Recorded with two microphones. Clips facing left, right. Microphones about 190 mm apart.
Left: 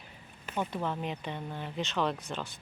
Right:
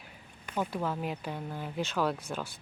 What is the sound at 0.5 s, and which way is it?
Speech, 5° right (ahead or behind).